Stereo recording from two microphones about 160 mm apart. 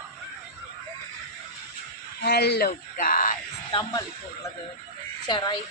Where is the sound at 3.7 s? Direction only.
30° left (ahead or behind).